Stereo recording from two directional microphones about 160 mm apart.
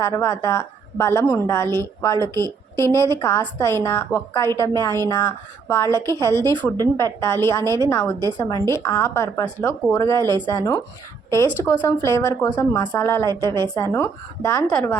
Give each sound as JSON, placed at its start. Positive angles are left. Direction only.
{"t": 0.0, "sound": "a woman's voice", "side_deg": 20}
{"t": 14.7, "sound": "speech", "side_deg": 5}